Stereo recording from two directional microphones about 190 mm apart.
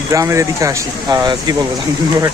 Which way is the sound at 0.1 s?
15° right (ahead or behind).